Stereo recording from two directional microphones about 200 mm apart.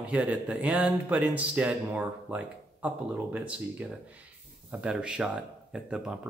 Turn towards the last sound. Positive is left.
turn(degrees=-5)  # may be behind; listen again after turning